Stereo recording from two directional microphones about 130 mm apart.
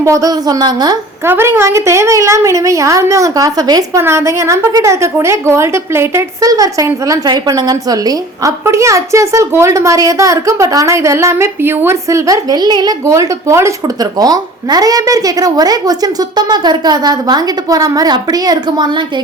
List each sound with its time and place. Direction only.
0.0 s a woman's voice: 25° right (ahead or behind)
1.2 s a woman's voice: 20° right (ahead or behind)